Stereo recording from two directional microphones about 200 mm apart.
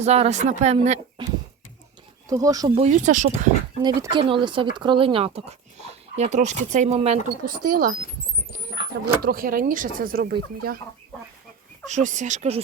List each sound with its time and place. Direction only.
0.0 s speech: 35° right (ahead or behind)
2.2 s speech: 15° right (ahead or behind)
2.7 s speech: 35° right (ahead or behind)
3.8 s speech: 20° right (ahead or behind)
7.7 s speech: 45° right (ahead or behind)
9.2 s speech: 45° right (ahead or behind)
11.9 s speech: 35° right (ahead or behind)